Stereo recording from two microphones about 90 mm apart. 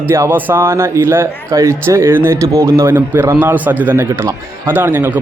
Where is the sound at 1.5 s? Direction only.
40° right (ahead or behind).